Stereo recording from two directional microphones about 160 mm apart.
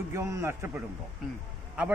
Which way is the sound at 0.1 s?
20° right (ahead or behind).